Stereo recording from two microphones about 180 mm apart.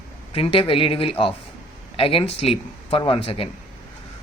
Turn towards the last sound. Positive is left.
turn(degrees=30)  # may be behind; listen again after turning